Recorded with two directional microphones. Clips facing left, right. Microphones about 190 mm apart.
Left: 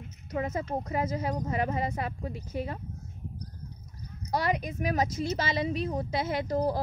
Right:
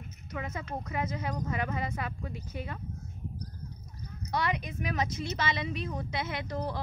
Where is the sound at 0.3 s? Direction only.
35° left (ahead or behind).